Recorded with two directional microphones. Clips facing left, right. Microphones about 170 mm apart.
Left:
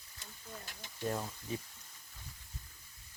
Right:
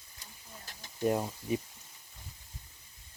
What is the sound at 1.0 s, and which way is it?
Speech, 20° right (ahead or behind).